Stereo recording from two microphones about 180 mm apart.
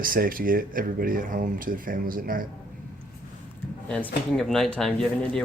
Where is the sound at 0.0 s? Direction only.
50° right (ahead or behind).